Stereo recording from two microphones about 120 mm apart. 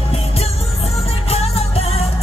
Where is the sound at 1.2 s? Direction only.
55° left (ahead or behind).